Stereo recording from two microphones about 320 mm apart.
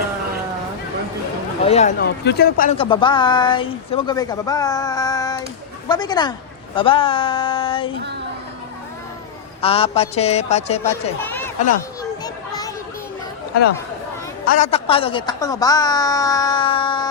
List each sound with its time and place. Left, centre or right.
1.6 s a man's voice: left
9.6 s a man's voice: centre
12.2 s children playing: centre
14.4 s a man's voice: left